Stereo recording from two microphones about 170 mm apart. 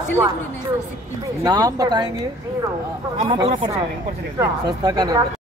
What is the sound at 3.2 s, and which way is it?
Speech, 30° right (ahead or behind).